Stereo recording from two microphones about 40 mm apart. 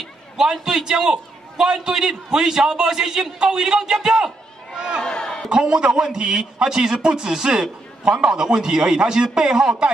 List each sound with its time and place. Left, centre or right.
0.4 s a man's voice: centre
4.7 s speech: right
5.0 s a sound: centre
5.5 s a man's voice: right